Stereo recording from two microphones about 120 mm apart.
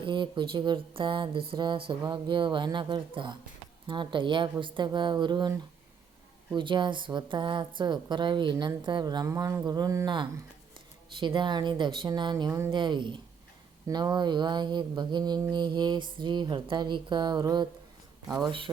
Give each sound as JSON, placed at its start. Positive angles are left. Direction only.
{"t": 0.0, "sound": "mantra", "side_deg": -40}
{"t": 11.2, "sound": "mantra", "side_deg": -40}
{"t": 12.5, "sound": "speech", "side_deg": -25}
{"t": 12.7, "sound": "mantra", "side_deg": -40}
{"t": 18.3, "sound": "speech", "side_deg": -5}